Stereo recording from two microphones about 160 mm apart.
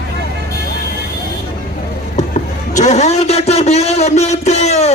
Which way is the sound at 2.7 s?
45° left (ahead or behind).